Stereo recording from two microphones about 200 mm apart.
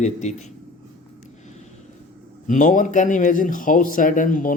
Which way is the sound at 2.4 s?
40° left (ahead or behind).